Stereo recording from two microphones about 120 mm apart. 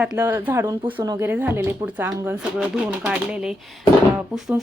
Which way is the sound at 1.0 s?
30° right (ahead or behind).